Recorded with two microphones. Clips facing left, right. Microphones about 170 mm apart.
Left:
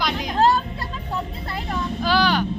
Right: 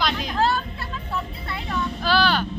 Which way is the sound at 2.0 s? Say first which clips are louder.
Left 1 dB; 15° left (ahead or behind).